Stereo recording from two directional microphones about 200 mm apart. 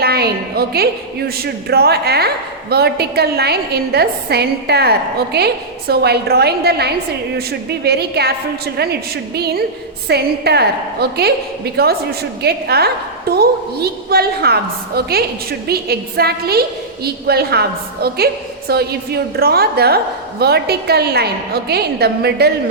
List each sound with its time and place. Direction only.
0.0 s a woman's voice: 50° right (ahead or behind)